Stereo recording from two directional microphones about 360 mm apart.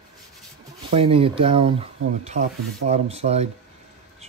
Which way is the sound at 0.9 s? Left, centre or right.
Centre.